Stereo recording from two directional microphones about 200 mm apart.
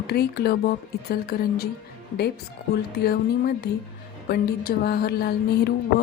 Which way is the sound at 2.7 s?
50° left (ahead or behind).